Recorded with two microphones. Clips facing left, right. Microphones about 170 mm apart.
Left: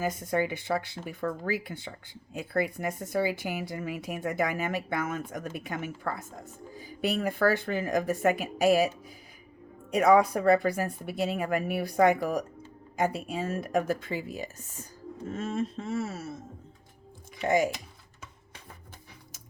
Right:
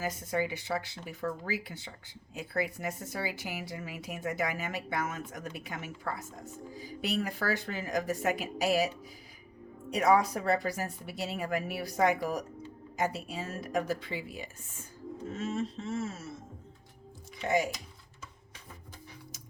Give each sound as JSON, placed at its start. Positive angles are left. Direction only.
{"t": 0.0, "sound": "speech", "side_deg": 55}
{"t": 9.9, "sound": "speech", "side_deg": 55}
{"t": 15.3, "sound": "speech", "side_deg": 50}
{"t": 17.4, "sound": "speech", "side_deg": 50}